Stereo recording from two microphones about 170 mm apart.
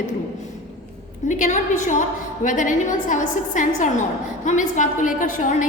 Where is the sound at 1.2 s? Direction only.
45° left (ahead or behind).